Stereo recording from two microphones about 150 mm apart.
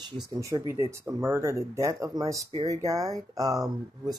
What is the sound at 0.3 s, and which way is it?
Speech, 20° right (ahead or behind).